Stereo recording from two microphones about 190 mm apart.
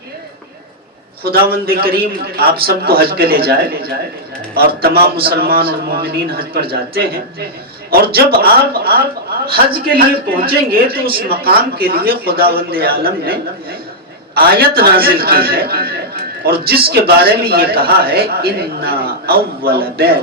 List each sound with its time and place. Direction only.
1.2 s a man's voice: 55° right (ahead or behind)